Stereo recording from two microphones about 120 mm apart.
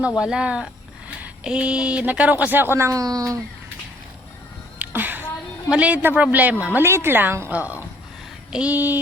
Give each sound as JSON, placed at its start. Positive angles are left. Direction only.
{"t": 0.2, "sound": "speech", "side_deg": -5}
{"t": 4.8, "sound": "a sound", "side_deg": -15}
{"t": 5.7, "sound": "speech", "side_deg": -10}